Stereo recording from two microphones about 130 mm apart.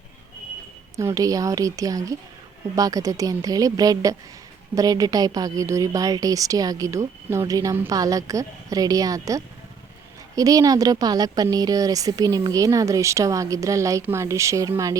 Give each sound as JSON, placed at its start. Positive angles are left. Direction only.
{"t": 0.9, "sound": "a woman's voice", "side_deg": -25}